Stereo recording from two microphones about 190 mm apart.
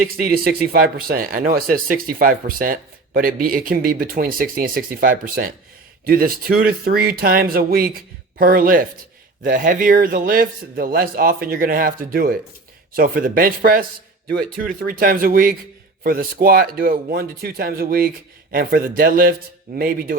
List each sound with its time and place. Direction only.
0.0 s speech: 50° right (ahead or behind)